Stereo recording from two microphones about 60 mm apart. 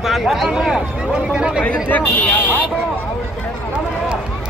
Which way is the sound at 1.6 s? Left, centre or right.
Left.